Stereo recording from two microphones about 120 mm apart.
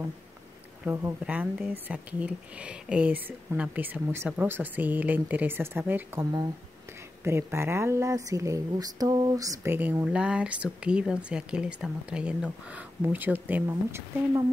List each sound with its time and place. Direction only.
0.8 s speech: 15° right (ahead or behind)
7.2 s speech: 20° right (ahead or behind)